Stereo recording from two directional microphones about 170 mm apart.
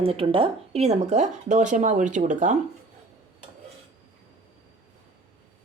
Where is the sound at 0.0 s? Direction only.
35° right (ahead or behind).